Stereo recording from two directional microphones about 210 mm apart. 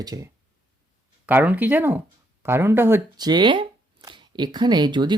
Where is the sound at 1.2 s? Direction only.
5° right (ahead or behind).